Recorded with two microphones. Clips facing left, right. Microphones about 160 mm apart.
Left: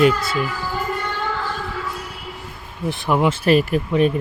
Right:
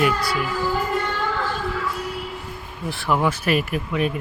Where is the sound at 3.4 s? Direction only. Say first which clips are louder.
Left 6 dB; 30° left (ahead or behind).